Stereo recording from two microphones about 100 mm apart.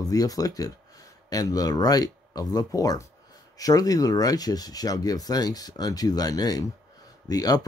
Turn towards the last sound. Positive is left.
turn(degrees=40)  # may be behind; listen again after turning